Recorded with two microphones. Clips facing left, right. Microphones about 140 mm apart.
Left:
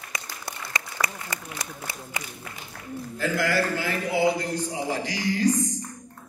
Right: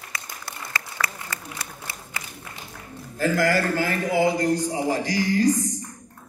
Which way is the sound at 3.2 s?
45° right (ahead or behind).